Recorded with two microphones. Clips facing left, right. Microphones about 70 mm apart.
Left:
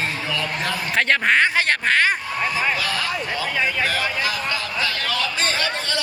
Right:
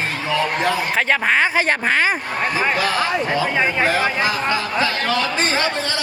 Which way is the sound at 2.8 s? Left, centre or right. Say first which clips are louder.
Right 5 dB; right.